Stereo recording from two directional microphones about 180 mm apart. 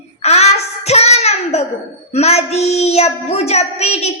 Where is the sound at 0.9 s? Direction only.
35° left (ahead or behind).